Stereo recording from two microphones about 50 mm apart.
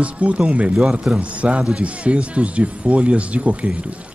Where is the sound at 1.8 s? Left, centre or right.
Right.